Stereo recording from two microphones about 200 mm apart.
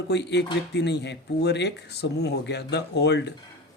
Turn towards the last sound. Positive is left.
turn(degrees=60)  # may be behind; listen again after turning